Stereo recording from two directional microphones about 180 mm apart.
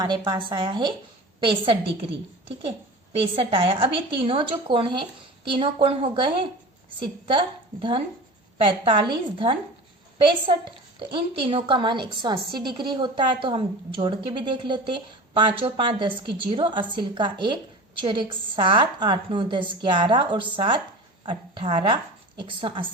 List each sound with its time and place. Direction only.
0.0 s a woman's voice: 25° right (ahead or behind)
3.3 s a woman's voice: 30° right (ahead or behind)
10.2 s a woman's voice: 30° right (ahead or behind)